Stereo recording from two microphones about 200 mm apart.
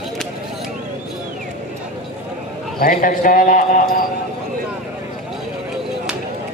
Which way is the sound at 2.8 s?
45° left (ahead or behind).